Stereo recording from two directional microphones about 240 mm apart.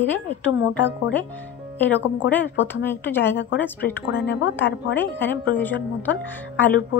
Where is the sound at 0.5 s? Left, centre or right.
Left.